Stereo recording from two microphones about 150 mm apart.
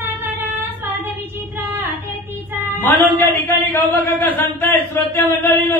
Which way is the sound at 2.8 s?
15° left (ahead or behind).